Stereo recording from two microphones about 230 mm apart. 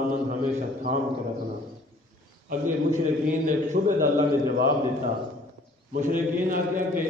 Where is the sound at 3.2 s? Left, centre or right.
Right.